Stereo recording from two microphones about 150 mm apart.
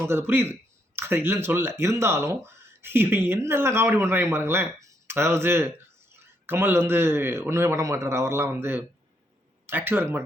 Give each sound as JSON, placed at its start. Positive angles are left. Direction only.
{"t": 0.0, "sound": "speech", "side_deg": -15}